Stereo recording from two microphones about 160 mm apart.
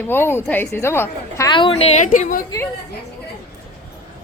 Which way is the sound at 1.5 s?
30° left (ahead or behind).